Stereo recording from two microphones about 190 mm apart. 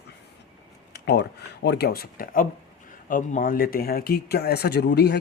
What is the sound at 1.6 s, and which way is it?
Speech, 60° left (ahead or behind).